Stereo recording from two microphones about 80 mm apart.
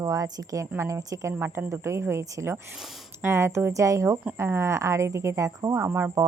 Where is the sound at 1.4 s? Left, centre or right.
Right.